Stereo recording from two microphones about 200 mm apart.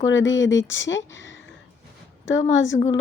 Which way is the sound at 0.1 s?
65° left (ahead or behind).